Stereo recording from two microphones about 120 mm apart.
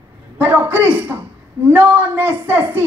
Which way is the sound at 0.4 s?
15° right (ahead or behind).